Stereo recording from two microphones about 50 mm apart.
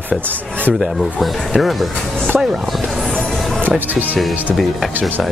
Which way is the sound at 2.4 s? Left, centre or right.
Centre.